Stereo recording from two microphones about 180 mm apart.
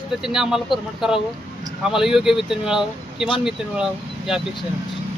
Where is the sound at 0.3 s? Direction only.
Centre (ahead or behind).